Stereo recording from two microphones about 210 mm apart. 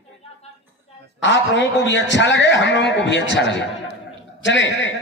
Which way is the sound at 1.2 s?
60° left (ahead or behind).